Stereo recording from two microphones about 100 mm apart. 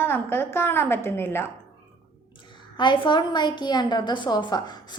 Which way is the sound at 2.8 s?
50° left (ahead or behind).